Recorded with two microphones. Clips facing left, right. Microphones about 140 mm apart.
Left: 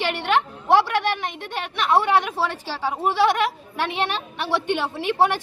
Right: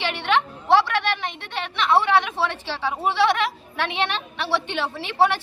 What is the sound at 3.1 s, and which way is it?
Speech, 45° left (ahead or behind).